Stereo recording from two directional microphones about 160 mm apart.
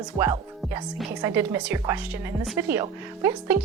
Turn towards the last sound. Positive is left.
turn(degrees=-15)  # may be behind; listen again after turning